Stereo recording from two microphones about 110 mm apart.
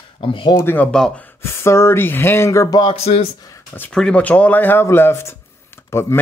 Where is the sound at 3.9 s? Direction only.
10° left (ahead or behind).